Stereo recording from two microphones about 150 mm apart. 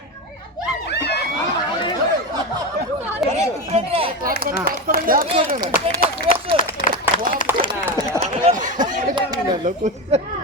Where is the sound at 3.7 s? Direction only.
45° right (ahead or behind).